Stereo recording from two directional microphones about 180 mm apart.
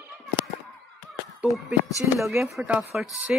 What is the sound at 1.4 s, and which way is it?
A woman's voice, 5° right (ahead or behind).